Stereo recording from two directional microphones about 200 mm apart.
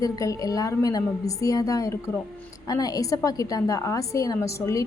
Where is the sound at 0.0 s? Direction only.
15° left (ahead or behind).